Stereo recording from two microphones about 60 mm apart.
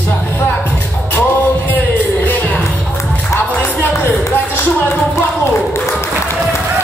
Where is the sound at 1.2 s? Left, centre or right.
Left.